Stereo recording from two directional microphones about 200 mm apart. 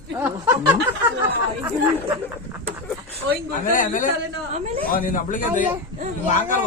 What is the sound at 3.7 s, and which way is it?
Speech, 40° left (ahead or behind).